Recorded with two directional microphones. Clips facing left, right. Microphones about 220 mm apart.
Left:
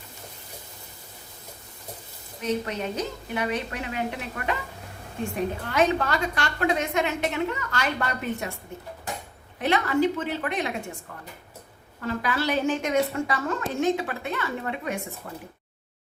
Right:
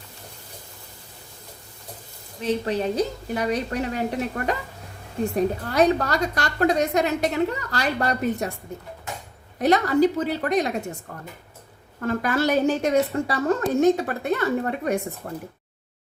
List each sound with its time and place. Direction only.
2.4 s a woman's voice: 30° right (ahead or behind)
5.6 s a woman's voice: 40° right (ahead or behind)
9.6 s a woman's voice: 40° right (ahead or behind)
11.9 s a woman's voice: 50° right (ahead or behind)